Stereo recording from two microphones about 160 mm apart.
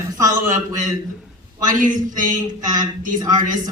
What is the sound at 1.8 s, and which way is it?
Speech, 55° right (ahead or behind).